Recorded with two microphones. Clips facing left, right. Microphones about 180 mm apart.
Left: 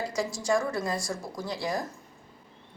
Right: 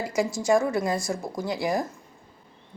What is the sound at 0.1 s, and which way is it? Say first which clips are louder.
A woman's voice: right 7 dB; 20° right (ahead or behind).